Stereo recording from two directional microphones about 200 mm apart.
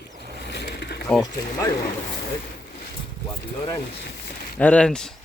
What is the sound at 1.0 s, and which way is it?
Speech, centre (ahead or behind).